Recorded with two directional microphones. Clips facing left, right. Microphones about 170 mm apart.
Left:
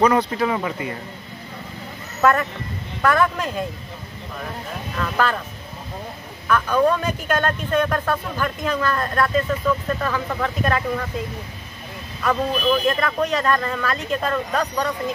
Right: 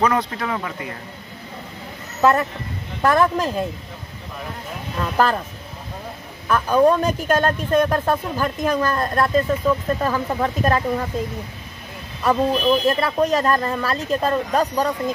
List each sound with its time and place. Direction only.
0.0 s speech: centre (ahead or behind)
3.0 s speech: 35° right (ahead or behind)
4.9 s speech: 25° right (ahead or behind)
6.4 s speech: 35° right (ahead or behind)
12.2 s speech: 30° right (ahead or behind)